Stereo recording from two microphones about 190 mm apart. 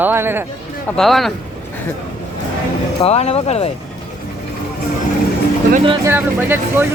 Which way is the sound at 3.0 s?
35° left (ahead or behind).